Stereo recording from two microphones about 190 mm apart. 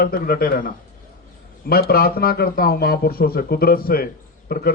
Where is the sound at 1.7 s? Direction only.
50° left (ahead or behind).